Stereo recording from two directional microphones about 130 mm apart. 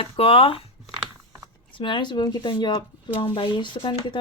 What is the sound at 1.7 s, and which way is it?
Speech, 40° left (ahead or behind).